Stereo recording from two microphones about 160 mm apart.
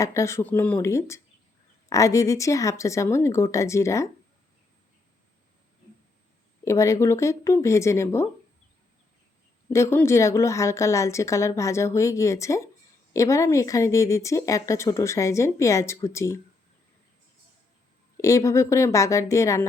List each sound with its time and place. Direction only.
0.0 s a woman's voice: 20° left (ahead or behind)
6.7 s a woman's voice: 20° left (ahead or behind)
9.6 s a woman's voice: 15° left (ahead or behind)
18.2 s speech: 20° left (ahead or behind)